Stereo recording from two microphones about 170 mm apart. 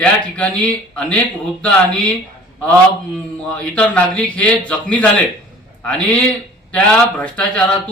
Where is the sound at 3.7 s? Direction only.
5° left (ahead or behind).